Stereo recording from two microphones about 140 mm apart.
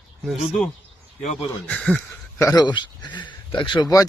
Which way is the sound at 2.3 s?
25° left (ahead or behind).